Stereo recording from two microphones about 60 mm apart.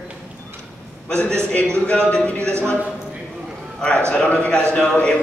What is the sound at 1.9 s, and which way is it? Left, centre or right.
Speech, centre.